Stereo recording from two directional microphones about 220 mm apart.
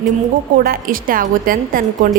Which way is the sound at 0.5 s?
40° right (ahead or behind).